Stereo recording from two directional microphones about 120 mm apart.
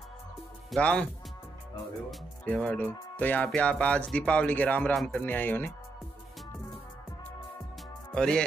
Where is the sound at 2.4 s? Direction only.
10° left (ahead or behind).